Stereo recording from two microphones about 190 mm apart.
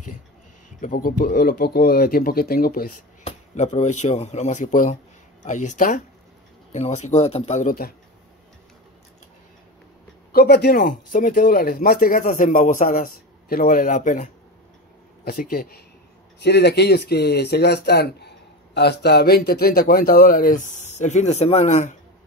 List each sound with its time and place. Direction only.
0.7 s speech: 45° left (ahead or behind)
3.3 s speech: 35° left (ahead or behind)
10.3 s speech: 55° left (ahead or behind)
16.4 s speech: 60° left (ahead or behind); by 21.9 s 35° left (ahead or behind)